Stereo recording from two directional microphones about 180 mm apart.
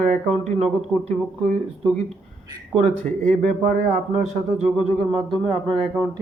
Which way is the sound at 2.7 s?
40° right (ahead or behind).